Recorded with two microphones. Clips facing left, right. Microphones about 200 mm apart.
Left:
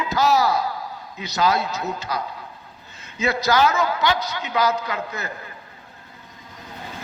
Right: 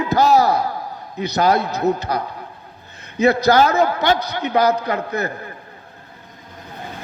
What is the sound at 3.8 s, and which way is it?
Speech, 55° right (ahead or behind).